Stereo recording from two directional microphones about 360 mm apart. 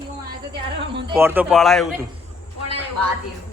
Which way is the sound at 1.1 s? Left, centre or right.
Centre.